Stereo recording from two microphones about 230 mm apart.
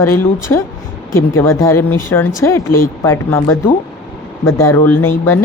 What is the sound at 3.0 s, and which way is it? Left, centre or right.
A woman's voice, centre.